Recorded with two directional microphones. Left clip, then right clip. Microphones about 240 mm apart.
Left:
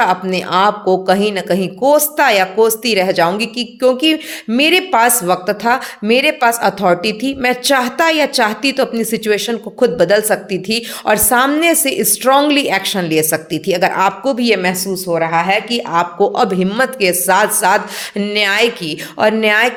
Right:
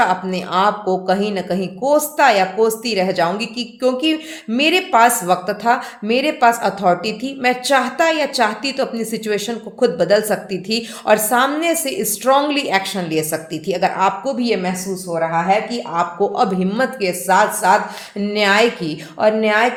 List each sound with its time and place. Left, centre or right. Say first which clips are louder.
0.0 s a woman's voice: left 3 dB; left